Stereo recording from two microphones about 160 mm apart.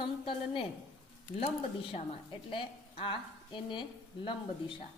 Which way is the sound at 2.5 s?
35° left (ahead or behind).